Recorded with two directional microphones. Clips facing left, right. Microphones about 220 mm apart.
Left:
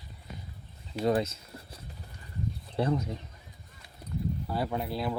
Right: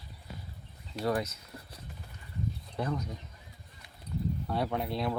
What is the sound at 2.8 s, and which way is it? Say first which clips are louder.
Speech: left 6 dB; 25° left (ahead or behind).